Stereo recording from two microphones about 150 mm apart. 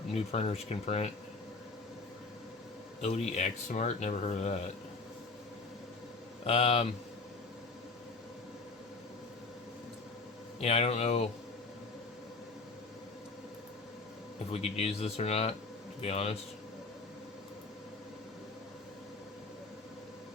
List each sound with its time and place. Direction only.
0.1 s speech: 45° left (ahead or behind)
3.0 s speech: 45° left (ahead or behind)
6.4 s speech: 40° left (ahead or behind)
10.6 s speech: 40° left (ahead or behind)
14.5 s speech: 45° left (ahead or behind)